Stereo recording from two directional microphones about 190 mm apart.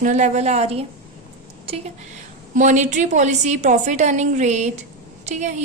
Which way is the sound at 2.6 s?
40° right (ahead or behind).